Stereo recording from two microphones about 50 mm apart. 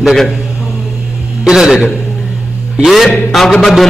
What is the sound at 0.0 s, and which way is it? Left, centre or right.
Speech, centre.